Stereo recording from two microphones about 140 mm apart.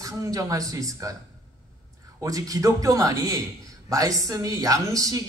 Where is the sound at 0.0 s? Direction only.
25° right (ahead or behind).